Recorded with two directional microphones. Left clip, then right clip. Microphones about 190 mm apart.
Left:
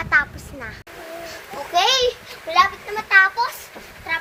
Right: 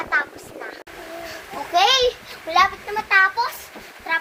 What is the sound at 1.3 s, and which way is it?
Children playing, 25° right (ahead or behind).